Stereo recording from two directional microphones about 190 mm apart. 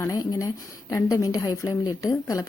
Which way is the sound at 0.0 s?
20° left (ahead or behind).